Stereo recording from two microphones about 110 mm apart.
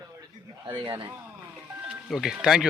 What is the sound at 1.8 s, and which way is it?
Speech, 5° right (ahead or behind).